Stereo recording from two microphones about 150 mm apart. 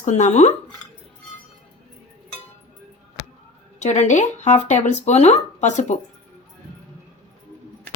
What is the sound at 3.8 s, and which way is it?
Speech, 50° left (ahead or behind).